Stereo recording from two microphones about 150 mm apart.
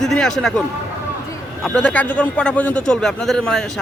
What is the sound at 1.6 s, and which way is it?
A man's voice, 5° left (ahead or behind).